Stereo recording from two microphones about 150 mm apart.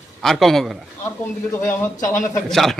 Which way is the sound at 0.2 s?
Centre (ahead or behind).